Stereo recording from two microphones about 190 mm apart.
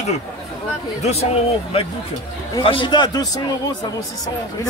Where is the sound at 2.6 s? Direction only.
25° left (ahead or behind).